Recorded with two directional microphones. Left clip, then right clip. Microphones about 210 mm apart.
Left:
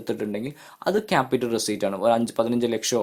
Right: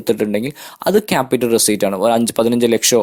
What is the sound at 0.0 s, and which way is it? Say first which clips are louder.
Speech: right 11 dB; 40° right (ahead or behind).